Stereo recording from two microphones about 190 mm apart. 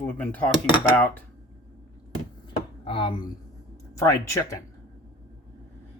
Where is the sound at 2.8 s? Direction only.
25° left (ahead or behind).